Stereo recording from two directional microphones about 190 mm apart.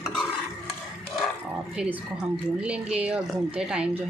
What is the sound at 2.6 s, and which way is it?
Speech, 5° right (ahead or behind).